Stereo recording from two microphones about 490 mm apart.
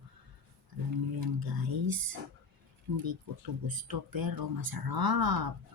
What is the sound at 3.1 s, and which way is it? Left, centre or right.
Speech, right.